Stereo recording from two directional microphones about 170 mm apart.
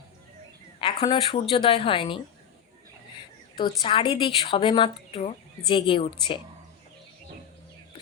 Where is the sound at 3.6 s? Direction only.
30° left (ahead or behind).